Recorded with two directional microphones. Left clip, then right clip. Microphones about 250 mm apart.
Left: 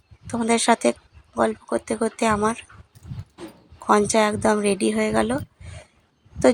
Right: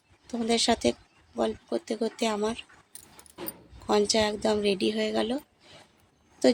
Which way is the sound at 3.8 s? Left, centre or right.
Centre.